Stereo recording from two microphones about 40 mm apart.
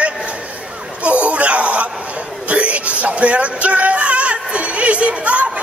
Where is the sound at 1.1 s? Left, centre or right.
Right.